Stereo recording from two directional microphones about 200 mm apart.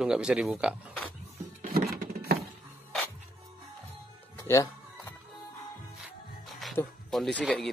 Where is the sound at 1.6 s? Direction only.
40° right (ahead or behind).